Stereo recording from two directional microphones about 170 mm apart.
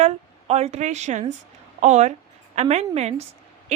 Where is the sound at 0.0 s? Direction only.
40° right (ahead or behind).